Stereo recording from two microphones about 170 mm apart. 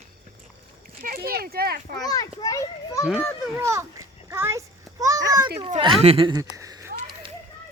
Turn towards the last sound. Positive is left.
turn(degrees=-20)  # may be behind; listen again after turning